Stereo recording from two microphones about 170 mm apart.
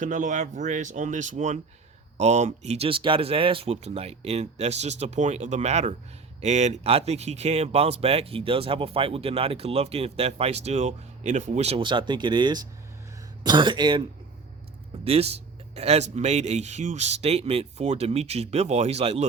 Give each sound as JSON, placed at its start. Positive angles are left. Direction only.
{"t": 0.0, "sound": "speech", "side_deg": -50}
{"t": 15.0, "sound": "speech", "side_deg": -35}